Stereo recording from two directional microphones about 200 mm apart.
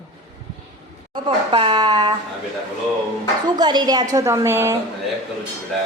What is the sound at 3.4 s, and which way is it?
A woman's voice, 20° right (ahead or behind).